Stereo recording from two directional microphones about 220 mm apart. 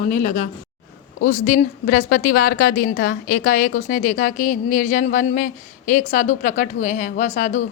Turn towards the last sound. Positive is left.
turn(degrees=35)  # may be behind; listen again after turning